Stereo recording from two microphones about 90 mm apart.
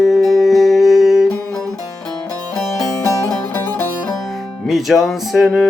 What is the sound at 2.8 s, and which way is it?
Music, 40° left (ahead or behind).